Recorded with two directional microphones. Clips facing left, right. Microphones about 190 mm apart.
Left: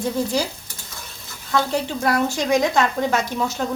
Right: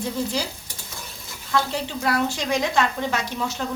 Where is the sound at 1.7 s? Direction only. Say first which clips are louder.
Left 4 dB; 45° left (ahead or behind).